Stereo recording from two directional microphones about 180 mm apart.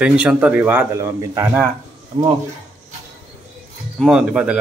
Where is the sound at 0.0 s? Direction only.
5° right (ahead or behind); by 2.3 s 20° right (ahead or behind).